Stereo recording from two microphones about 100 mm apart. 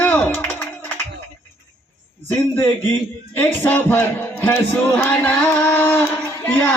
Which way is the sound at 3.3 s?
20° left (ahead or behind).